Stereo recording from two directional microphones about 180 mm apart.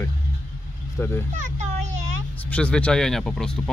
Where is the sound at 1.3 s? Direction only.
40° right (ahead or behind).